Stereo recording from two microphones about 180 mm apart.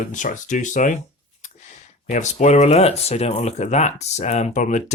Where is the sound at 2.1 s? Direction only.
40° left (ahead or behind).